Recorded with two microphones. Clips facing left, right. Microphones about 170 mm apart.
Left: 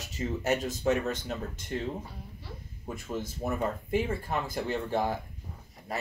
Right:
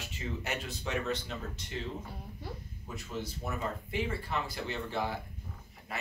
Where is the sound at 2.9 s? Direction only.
50° left (ahead or behind).